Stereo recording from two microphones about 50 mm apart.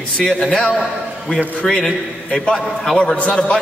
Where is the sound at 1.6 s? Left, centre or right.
Centre.